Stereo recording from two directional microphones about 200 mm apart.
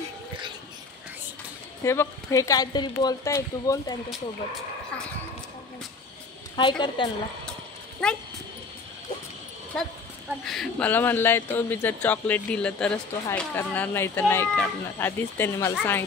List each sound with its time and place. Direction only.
1.8 s speech: 15° left (ahead or behind)
6.5 s a woman's voice: 25° left (ahead or behind)
8.0 s speech: 5° left (ahead or behind)
9.7 s speech: 5° left (ahead or behind)